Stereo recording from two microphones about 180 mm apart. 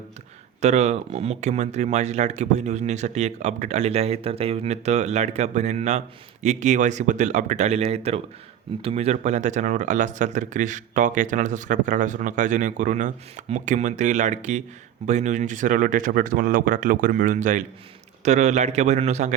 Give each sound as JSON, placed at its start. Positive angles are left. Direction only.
{"t": 0.6, "sound": "speech", "side_deg": -40}